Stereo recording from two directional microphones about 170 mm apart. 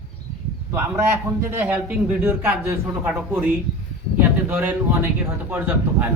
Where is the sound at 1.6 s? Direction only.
10° right (ahead or behind).